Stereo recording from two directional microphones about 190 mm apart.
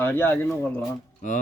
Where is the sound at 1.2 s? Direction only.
45° left (ahead or behind).